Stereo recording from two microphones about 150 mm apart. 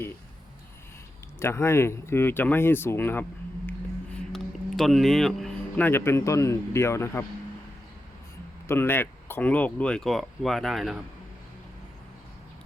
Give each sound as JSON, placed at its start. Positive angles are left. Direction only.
{"t": 1.4, "sound": "speech", "side_deg": 15}
{"t": 3.7, "sound": "a sound", "side_deg": 5}
{"t": 4.8, "sound": "speech", "side_deg": 0}
{"t": 8.6, "sound": "speech", "side_deg": 15}